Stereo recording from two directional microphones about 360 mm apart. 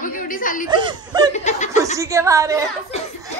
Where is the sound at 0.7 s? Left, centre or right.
Centre.